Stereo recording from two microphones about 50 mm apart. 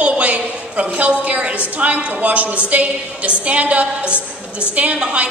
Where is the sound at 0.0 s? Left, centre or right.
Right.